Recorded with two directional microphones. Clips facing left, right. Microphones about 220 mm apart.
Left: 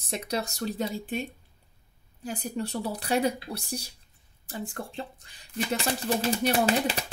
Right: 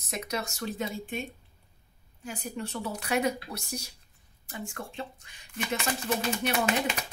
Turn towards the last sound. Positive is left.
turn(degrees=35)  # may be behind; listen again after turning